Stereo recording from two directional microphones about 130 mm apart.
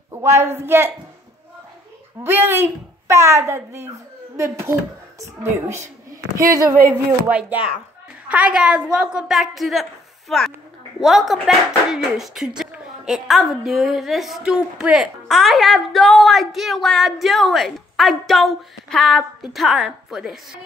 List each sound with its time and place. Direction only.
0.1 s speech: 20° right (ahead or behind)
2.2 s a woman's voice: 15° right (ahead or behind)